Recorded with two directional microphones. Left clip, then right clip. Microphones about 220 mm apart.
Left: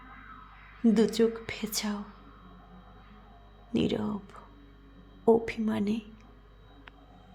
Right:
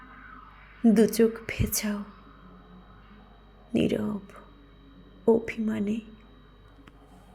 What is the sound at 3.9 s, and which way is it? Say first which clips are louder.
Speech: right 3 dB; centre (ahead or behind).